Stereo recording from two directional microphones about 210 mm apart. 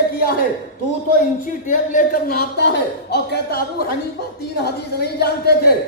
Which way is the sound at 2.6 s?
55° left (ahead or behind).